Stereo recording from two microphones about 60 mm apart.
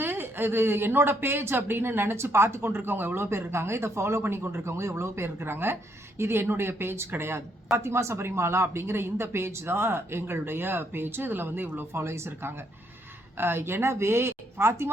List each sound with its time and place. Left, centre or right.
0.0 s speech: right